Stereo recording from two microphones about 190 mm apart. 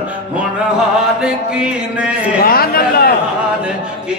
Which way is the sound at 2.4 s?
55° left (ahead or behind).